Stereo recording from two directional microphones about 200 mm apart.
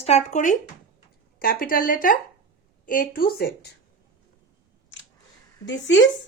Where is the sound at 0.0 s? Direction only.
35° left (ahead or behind).